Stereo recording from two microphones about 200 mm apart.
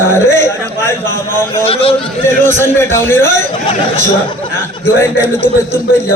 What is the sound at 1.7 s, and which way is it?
Speech, 30° left (ahead or behind).